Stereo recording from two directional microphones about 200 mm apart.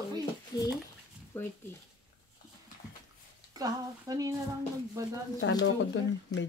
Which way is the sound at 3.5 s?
20° right (ahead or behind).